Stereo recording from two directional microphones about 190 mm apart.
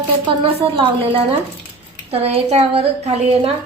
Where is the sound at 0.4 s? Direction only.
30° right (ahead or behind).